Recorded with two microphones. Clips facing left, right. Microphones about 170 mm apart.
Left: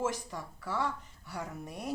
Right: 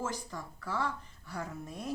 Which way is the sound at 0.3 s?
15° left (ahead or behind).